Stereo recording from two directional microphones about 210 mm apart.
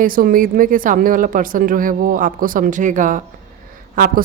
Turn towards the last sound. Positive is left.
turn(degrees=-40)  # may be behind; listen again after turning